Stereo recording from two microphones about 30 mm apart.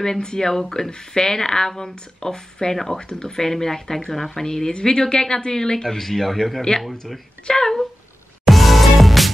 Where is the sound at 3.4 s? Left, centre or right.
Centre.